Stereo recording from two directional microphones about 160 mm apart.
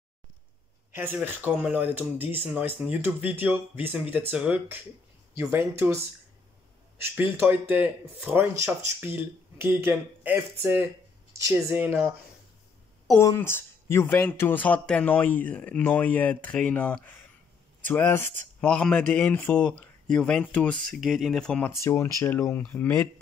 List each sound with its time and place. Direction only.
0.9 s speech: 15° right (ahead or behind)
13.3 s speech: 15° left (ahead or behind)